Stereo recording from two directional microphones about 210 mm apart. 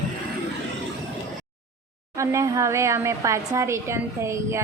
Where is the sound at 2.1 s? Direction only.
15° right (ahead or behind).